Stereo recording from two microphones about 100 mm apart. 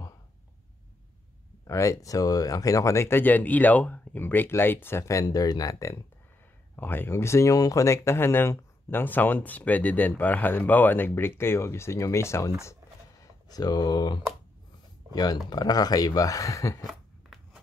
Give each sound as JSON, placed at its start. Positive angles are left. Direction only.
{"t": 1.7, "sound": "speech", "side_deg": 30}
{"t": 6.8, "sound": "speech", "side_deg": 20}
{"t": 12.8, "sound": "a sound", "side_deg": -30}
{"t": 13.2, "sound": "speech", "side_deg": 40}
{"t": 15.5, "sound": "speech", "side_deg": 40}